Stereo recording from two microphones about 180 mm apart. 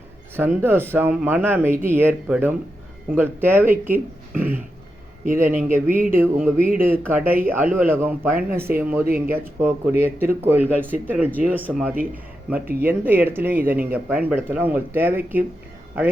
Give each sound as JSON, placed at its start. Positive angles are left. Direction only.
{"t": 0.3, "sound": "speech", "side_deg": -10}
{"t": 5.2, "sound": "speech", "side_deg": -45}
{"t": 6.1, "sound": "speech", "side_deg": -10}